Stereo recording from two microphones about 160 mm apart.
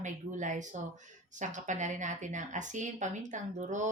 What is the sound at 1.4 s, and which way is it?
Speech, 50° right (ahead or behind).